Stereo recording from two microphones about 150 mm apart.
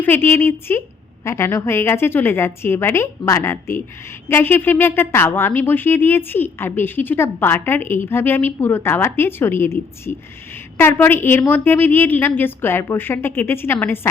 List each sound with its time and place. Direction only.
0.0 s speech: 15° left (ahead or behind)